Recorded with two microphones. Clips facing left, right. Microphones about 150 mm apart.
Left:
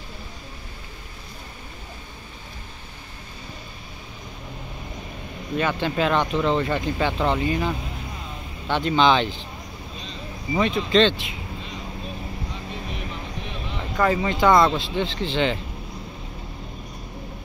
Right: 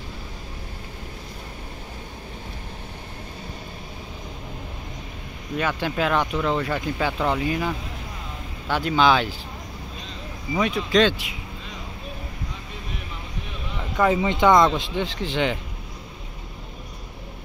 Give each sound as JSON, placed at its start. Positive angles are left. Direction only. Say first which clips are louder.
{"t": 5.6, "sound": "speech", "louder": "left 1 dB", "side_deg": -5}
{"t": 10.6, "sound": "speech", "louder": "left 1 dB", "side_deg": -10}
{"t": 14.0, "sound": "speech", "louder": "right 1 dB", "side_deg": -15}
{"t": 14.5, "sound": "speech", "louder": "even", "side_deg": 5}
{"t": 14.8, "sound": "speech", "louder": "left 1 dB", "side_deg": -10}